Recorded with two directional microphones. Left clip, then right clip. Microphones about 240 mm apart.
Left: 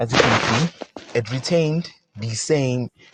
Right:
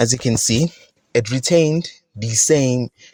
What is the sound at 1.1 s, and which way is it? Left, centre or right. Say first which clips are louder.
Speech: right 5 dB; right.